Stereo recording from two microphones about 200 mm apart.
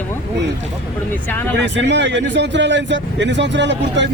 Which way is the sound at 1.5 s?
60° right (ahead or behind).